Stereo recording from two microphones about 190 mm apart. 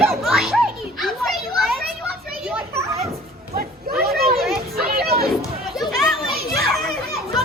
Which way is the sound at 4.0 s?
55° right (ahead or behind).